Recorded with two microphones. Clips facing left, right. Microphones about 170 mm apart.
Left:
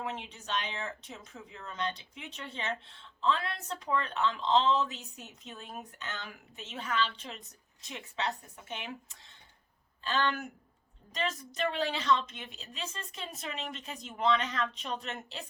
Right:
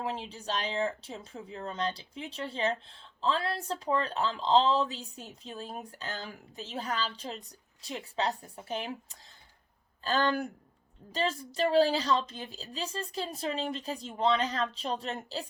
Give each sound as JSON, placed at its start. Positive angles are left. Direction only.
{"t": 0.0, "sound": "speech", "side_deg": -30}